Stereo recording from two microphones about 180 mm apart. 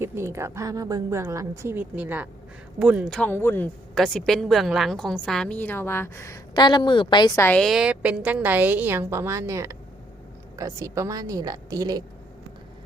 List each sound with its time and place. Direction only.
0.0 s a woman's voice: 15° right (ahead or behind)
3.1 s a woman's voice: 10° left (ahead or behind)
3.9 s a woman's voice: centre (ahead or behind); by 12.0 s 20° right (ahead or behind)